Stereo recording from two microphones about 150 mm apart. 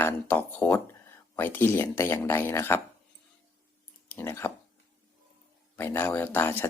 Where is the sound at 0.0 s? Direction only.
10° left (ahead or behind).